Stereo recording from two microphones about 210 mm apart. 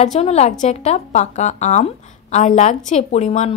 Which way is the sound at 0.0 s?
30° left (ahead or behind).